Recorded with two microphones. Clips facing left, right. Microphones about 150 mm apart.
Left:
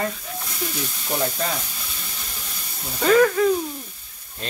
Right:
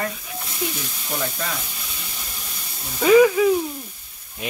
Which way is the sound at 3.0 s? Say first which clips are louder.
Right 3 dB; 10° right (ahead or behind).